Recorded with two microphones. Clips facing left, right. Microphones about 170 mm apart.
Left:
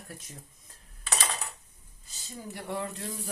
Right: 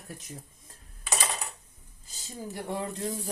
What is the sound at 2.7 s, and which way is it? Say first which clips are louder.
Speech: right 2 dB; 20° right (ahead or behind).